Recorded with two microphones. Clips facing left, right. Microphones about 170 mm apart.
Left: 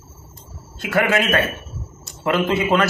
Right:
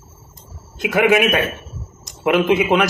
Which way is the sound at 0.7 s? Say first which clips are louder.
Right 4 dB; 15° right (ahead or behind).